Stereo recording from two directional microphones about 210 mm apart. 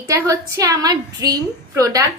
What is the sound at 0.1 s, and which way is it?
A woman's voice, 15° right (ahead or behind).